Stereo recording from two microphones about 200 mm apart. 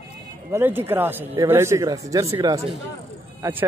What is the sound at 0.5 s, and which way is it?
Speech, 10° right (ahead or behind).